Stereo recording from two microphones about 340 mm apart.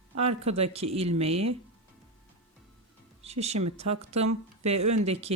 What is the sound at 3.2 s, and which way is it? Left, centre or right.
Speech, centre.